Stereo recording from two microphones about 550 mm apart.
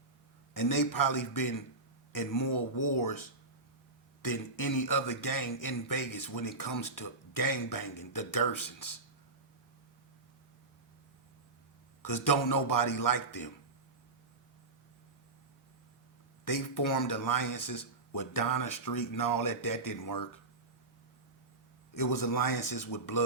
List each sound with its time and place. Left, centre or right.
0.5 s speech: left
12.0 s speech: left
16.5 s speech: left
21.9 s speech: left